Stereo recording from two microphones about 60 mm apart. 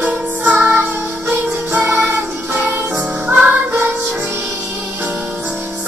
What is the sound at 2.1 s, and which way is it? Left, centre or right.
Music, right.